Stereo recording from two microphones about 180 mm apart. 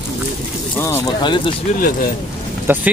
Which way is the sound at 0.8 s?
20° left (ahead or behind).